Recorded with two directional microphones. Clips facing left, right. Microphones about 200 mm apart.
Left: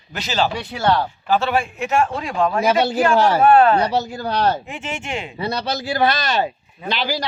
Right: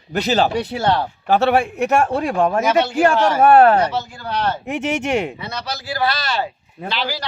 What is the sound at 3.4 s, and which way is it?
Speech, 65° right (ahead or behind).